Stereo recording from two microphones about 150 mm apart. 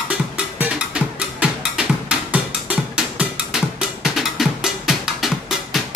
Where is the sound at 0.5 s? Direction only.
10° right (ahead or behind).